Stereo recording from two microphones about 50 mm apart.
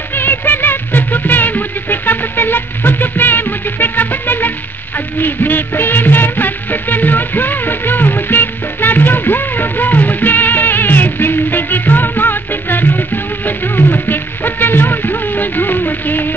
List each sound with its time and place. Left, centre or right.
0.1 s music: left